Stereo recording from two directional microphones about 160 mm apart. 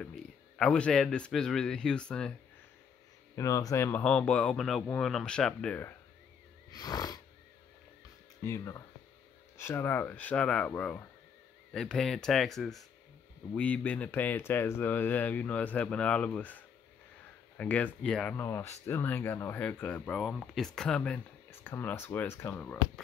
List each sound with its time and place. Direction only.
0.0 s speech: 5° left (ahead or behind)
3.3 s speech: 20° left (ahead or behind)
6.7 s wheeze: 25° left (ahead or behind)
8.4 s speech: 15° left (ahead or behind)